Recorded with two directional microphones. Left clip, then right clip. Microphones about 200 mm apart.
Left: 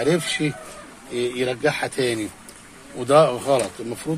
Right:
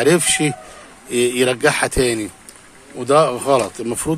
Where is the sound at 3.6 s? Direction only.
35° right (ahead or behind).